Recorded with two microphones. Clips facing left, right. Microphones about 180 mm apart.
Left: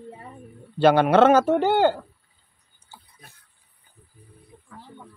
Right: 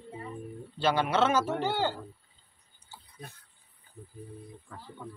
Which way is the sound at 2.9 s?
50° left (ahead or behind).